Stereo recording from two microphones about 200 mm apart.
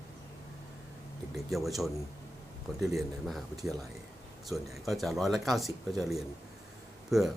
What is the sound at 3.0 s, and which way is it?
Speech, centre (ahead or behind).